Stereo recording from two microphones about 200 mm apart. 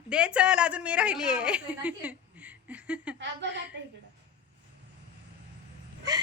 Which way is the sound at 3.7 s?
60° right (ahead or behind).